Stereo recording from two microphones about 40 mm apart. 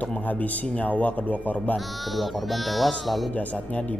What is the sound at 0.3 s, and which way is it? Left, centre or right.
Speech, left.